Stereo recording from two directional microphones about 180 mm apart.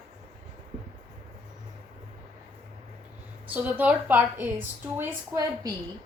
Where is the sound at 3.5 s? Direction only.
10° right (ahead or behind).